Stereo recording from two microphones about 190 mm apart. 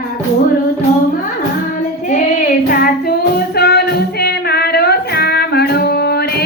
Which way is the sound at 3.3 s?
60° left (ahead or behind).